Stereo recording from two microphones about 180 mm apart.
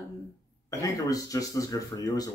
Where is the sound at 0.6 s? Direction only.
20° left (ahead or behind).